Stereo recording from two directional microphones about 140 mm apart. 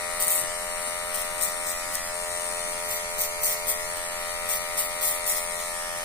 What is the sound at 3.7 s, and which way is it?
Electric shaver, 15° left (ahead or behind).